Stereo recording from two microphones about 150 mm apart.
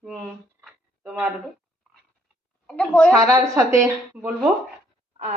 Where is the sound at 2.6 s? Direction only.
5° left (ahead or behind).